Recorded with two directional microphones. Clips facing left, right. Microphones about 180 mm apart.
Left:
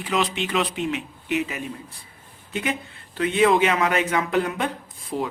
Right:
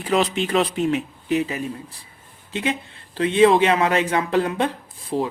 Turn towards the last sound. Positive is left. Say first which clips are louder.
# right 4 dB
turn(degrees=-30)  # may be behind; listen again after turning